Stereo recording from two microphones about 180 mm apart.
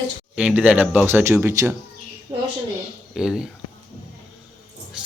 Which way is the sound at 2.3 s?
25° right (ahead or behind).